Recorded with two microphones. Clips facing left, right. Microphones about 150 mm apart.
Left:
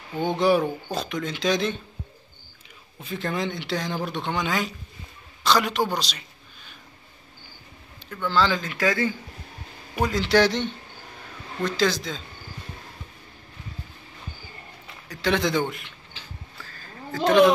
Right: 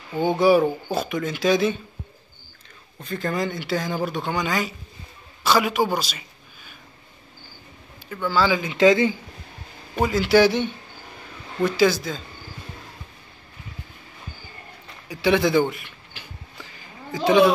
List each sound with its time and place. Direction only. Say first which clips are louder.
0.2 s speech: right 4 dB; 5° right (ahead or behind)
3.0 s a man's voice: right 2 dB; centre (ahead or behind)
8.1 s speech: right 2 dB; 5° right (ahead or behind)
8.7 s speech: right 10 dB; 20° right (ahead or behind)
10.0 s speech: right 3 dB; 5° right (ahead or behind)
15.0 s speech: right 4 dB; 10° right (ahead or behind)
16.5 s a sound: right 1 dB; 15° right (ahead or behind)